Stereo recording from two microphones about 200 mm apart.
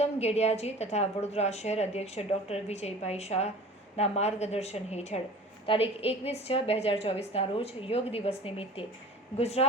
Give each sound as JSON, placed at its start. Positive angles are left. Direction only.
{"t": 0.0, "sound": "a woman's voice", "side_deg": 30}